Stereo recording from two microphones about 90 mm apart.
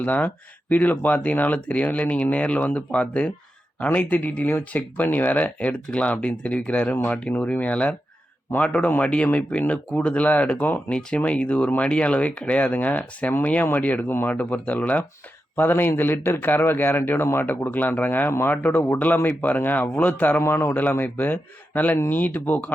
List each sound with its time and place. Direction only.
0.0 s a man's voice: 15° left (ahead or behind)